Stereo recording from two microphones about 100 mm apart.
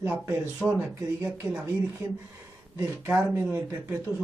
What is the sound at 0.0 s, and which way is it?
Speech, 25° right (ahead or behind).